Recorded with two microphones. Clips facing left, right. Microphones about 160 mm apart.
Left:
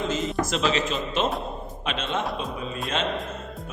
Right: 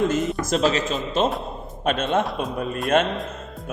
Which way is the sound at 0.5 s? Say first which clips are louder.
Right 6 dB; 40° right (ahead or behind).